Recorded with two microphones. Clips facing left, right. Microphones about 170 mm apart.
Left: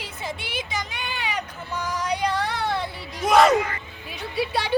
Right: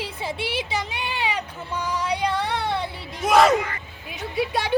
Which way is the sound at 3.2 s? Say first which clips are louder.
Even; centre (ahead or behind).